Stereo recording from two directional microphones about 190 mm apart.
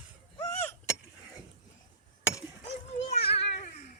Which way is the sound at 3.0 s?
30° left (ahead or behind).